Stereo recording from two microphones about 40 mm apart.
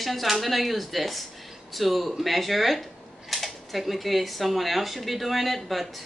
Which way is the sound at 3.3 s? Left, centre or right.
Centre.